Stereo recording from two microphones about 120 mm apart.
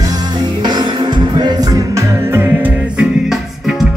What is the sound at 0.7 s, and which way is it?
Music, 35° right (ahead or behind).